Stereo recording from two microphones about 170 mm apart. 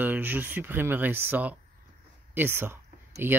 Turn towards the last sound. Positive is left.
turn(degrees=-15)  # may be behind; listen again after turning